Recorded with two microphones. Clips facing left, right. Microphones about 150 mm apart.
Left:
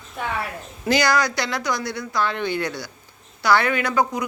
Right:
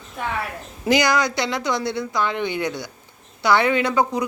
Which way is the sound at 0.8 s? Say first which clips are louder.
Right 1 dB; 20° right (ahead or behind).